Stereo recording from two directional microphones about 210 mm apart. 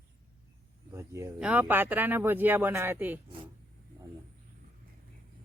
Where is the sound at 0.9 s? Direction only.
15° right (ahead or behind).